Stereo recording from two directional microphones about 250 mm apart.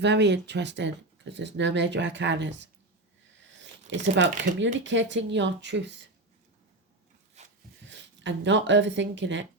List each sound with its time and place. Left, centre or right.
0.0 s speech: right
7.4 s a sound: right
7.9 s speech: right